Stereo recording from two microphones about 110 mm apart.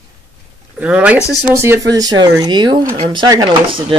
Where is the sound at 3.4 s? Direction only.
55° right (ahead or behind).